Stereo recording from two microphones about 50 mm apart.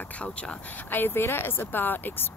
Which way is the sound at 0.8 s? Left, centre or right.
Left.